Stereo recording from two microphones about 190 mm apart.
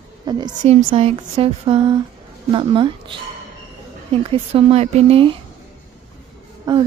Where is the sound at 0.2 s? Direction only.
20° right (ahead or behind).